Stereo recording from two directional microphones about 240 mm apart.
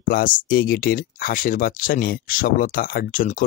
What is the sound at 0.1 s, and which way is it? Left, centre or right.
Speech, left.